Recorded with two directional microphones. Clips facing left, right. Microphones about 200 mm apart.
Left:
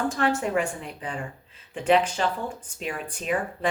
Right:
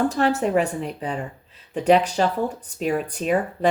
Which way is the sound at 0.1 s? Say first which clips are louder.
Right 4 dB; 40° right (ahead or behind).